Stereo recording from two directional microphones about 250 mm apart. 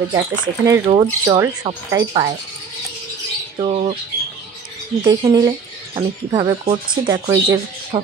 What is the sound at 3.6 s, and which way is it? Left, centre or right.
Speech, right.